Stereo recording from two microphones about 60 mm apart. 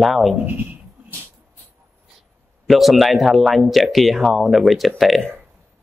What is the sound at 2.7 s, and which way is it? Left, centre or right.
A man's voice, centre.